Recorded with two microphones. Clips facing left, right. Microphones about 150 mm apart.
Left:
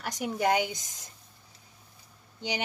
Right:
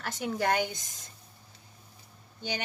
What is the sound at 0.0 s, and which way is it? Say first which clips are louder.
Speech: left 2 dB; 15° left (ahead or behind).